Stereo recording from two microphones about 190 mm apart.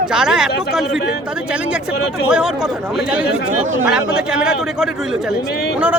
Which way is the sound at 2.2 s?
5° right (ahead or behind).